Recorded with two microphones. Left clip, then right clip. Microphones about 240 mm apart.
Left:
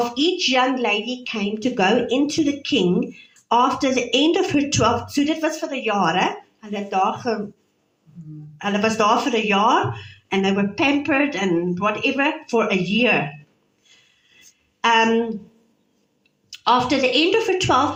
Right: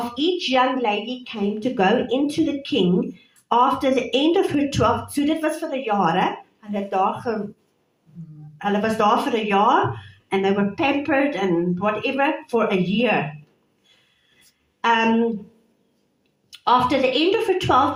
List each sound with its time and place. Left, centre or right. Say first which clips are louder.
0.0 s a woman's voice: left 3 dB; left
8.5 s a woman's voice: left 1 dB; left
14.8 s a woman's voice: left 2 dB; left
16.5 s a woman's voice: even; left